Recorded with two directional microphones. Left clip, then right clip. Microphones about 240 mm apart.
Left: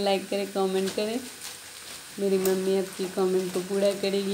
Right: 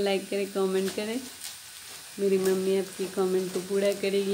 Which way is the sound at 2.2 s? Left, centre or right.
Centre.